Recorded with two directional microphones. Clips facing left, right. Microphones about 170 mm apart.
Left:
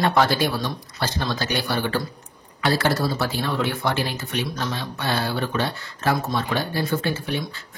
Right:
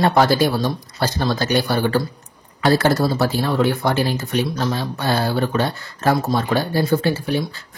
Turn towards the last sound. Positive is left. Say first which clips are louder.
# right 6 dB
turn(degrees=-35)  # may be behind; listen again after turning